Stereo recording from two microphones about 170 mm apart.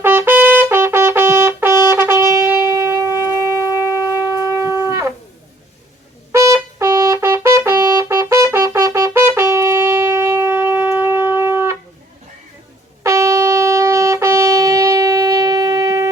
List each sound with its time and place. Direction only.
0.0 s trumpet: 10° right (ahead or behind)
1.9 s shofar: 15° right (ahead or behind)
6.3 s trumpet: 15° right (ahead or behind)
10.8 s shofar: 10° right (ahead or behind)
13.0 s shofar: 15° right (ahead or behind)